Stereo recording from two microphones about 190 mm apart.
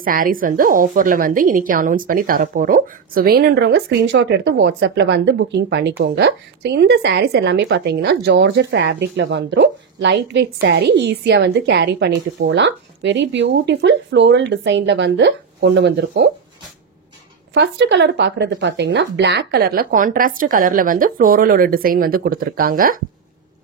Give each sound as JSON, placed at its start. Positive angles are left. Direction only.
{"t": 0.0, "sound": "a woman's voice", "side_deg": -45}
{"t": 17.6, "sound": "speech", "side_deg": -70}